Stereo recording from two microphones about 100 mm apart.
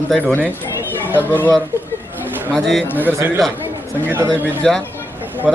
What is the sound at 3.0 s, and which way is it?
A man's voice, 20° right (ahead or behind).